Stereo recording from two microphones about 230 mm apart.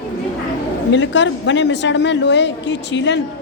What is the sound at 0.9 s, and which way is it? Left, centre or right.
A woman's voice, left.